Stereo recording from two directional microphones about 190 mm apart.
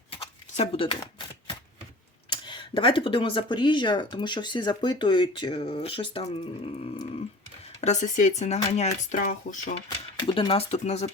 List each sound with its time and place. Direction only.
0.1 s a sound: 30° left (ahead or behind)
2.3 s speech: 25° left (ahead or behind); by 9.7 s 45° left (ahead or behind)
10.2 s speech: 25° left (ahead or behind)